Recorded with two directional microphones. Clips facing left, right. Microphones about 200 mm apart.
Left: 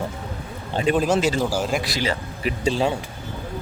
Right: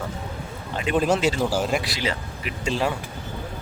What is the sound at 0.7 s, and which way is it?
Speech, 30° left (ahead or behind).